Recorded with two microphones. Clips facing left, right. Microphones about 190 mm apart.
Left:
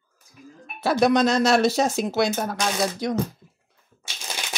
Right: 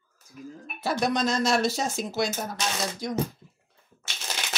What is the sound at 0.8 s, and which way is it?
Speech, 70° left (ahead or behind).